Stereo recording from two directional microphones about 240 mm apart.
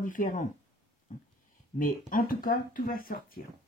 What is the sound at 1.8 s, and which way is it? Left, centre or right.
Speech, left.